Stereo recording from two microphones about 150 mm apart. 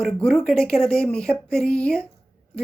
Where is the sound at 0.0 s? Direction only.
5° left (ahead or behind).